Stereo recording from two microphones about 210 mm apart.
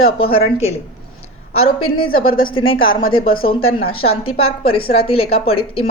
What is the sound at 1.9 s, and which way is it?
Speech, 80° left.